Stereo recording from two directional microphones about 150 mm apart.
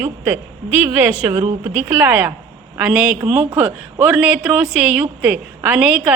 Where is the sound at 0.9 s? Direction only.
10° right (ahead or behind).